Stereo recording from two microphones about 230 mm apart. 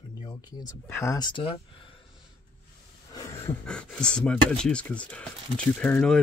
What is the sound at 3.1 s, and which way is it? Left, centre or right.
Speech, centre.